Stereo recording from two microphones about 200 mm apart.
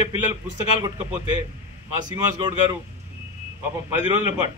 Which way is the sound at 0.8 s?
20° right (ahead or behind).